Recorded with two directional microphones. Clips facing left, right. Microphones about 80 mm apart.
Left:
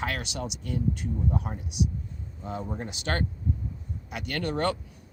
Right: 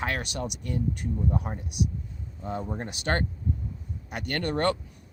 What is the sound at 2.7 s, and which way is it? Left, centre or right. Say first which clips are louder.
Speech: right 1 dB; right.